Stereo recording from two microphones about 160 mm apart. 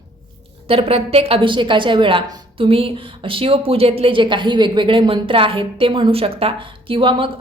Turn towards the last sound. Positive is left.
turn(degrees=-30)  # may be behind; listen again after turning